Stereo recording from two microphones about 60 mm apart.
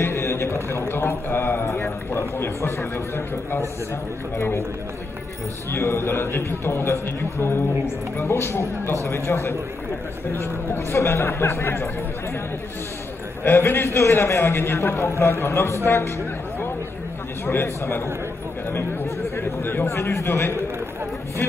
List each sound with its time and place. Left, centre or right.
0.0 s a man's voice: left
4.4 s a man's voice: left
5.7 s a man's voice: left
13.4 s a man's voice: left
17.5 s a man's voice: left
19.3 s a man's voice: left